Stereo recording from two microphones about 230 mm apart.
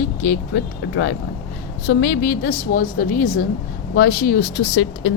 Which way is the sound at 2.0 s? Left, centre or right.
Left.